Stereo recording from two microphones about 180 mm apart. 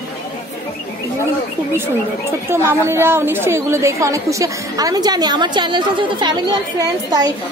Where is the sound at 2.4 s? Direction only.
15° right (ahead or behind).